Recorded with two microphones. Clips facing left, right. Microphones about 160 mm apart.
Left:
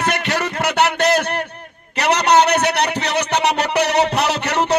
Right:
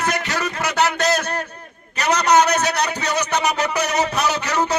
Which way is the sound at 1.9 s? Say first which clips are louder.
Left 2 dB; 65° left (ahead or behind).